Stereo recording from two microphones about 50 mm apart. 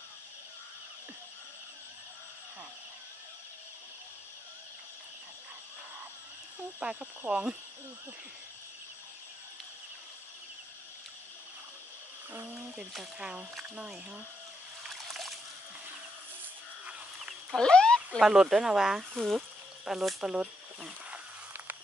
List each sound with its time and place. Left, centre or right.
6.8 s speech: right
12.3 s a sound: right
13.2 s speech: centre
14.9 s trickle: centre
17.6 s speech: centre
18.2 s speech: centre
19.1 s speech: centre
19.8 s speech: centre